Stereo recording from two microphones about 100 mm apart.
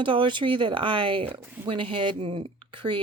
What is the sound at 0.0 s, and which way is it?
Speech, 55° right (ahead or behind).